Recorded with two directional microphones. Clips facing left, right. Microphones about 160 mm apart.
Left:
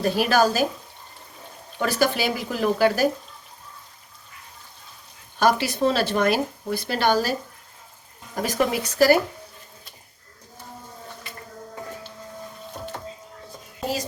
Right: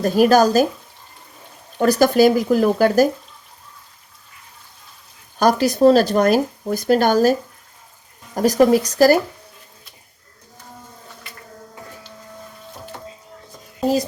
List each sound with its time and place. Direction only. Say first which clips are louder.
0.0 s speech: right 6 dB; 45° right (ahead or behind)
1.8 s speech: right 9 dB; 40° right (ahead or behind)
5.4 s speech: right 6 dB; 40° right (ahead or behind)
8.4 s speech: right 9 dB; 40° right (ahead or behind)